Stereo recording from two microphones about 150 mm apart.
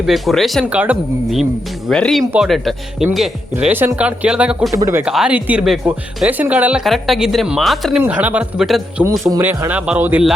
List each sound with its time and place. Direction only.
0.0 s speech: centre (ahead or behind)
3.5 s speech: 15° right (ahead or behind)
4.7 s speech: 20° right (ahead or behind)
5.0 s speech: 5° right (ahead or behind)
8.0 s speech: 10° right (ahead or behind)
9.2 s speech: 15° right (ahead or behind)